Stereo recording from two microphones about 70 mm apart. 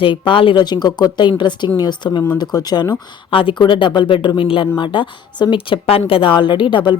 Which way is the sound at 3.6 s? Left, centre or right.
Left.